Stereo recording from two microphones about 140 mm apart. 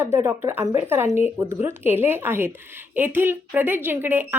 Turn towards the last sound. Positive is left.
turn(degrees=-15)  # may be behind; listen again after turning